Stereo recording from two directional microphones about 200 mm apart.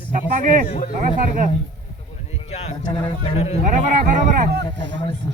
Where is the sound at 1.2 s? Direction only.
40° right (ahead or behind).